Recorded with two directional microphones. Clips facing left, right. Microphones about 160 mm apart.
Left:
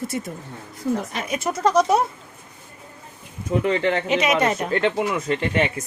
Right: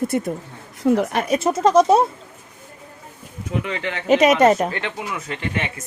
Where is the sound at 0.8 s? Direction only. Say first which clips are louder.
Right 7 dB; 65° right (ahead or behind).